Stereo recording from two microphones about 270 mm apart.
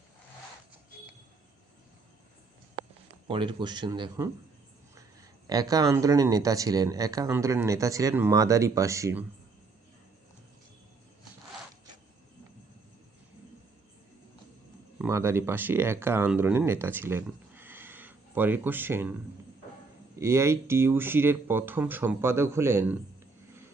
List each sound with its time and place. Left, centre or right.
3.2 s speech: centre
5.5 s speech: centre
14.9 s speech: centre
20.1 s speech: centre